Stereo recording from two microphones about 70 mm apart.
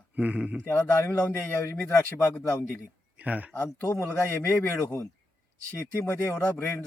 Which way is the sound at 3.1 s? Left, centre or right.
Right.